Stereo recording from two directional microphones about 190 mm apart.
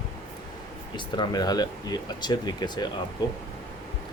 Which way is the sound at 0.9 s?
20° left (ahead or behind).